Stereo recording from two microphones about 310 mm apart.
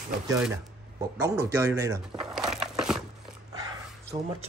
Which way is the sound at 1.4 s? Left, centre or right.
Centre.